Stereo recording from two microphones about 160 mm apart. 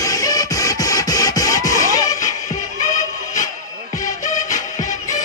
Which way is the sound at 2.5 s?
50° left (ahead or behind).